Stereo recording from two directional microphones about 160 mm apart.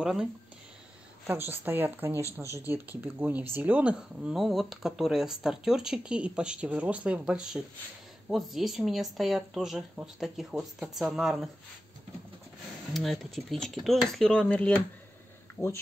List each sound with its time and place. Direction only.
0.0 s speech: 5° right (ahead or behind)
12.9 s speech: centre (ahead or behind)